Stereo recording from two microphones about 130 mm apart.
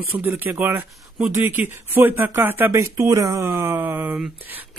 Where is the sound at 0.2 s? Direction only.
15° right (ahead or behind).